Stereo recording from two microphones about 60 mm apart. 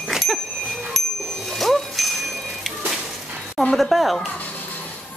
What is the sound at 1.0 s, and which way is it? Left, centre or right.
Bicycle bell, centre.